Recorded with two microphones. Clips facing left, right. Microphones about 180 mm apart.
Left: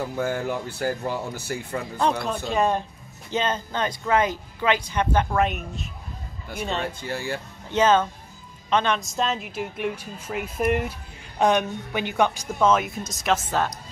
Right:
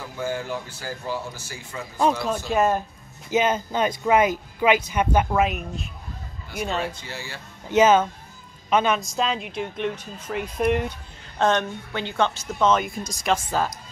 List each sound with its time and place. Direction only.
0.2 s speech: 60° left (ahead or behind)
2.2 s speech: centre (ahead or behind)
6.9 s speech: 55° left (ahead or behind)
7.7 s speech: 10° right (ahead or behind); by 12.4 s 15° left (ahead or behind)
12.5 s speech: 5° left (ahead or behind)